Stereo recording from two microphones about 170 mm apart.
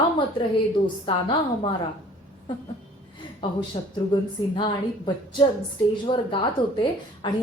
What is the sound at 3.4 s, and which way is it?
A woman's voice, 25° left (ahead or behind).